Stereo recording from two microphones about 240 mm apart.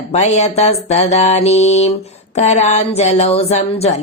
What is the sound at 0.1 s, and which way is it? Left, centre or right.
Speech, left.